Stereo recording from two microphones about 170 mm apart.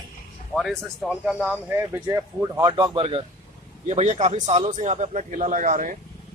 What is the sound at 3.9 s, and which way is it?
A man's voice, 40° right (ahead or behind).